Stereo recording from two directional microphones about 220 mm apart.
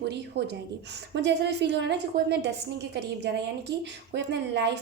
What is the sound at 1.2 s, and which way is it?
A woman's voice, 50° right (ahead or behind).